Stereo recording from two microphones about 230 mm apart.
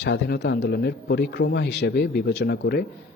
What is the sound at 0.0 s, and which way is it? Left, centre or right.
A man's voice, left.